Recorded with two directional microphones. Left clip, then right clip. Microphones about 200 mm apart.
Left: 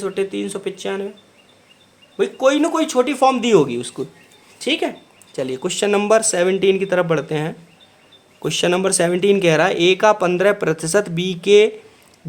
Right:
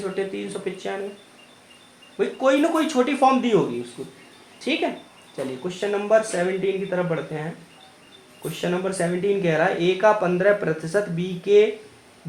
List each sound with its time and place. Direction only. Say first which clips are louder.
0.0 s a man's voice: left 5 dB; 40° left (ahead or behind)
2.1 s a man's voice: left 4 dB; 40° left (ahead or behind)
4.6 s speech: left 4 dB; 45° left (ahead or behind)